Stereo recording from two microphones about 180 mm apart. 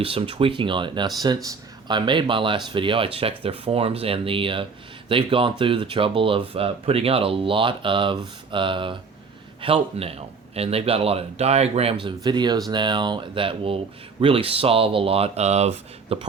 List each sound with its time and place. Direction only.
0.0 s speech: 30° right (ahead or behind)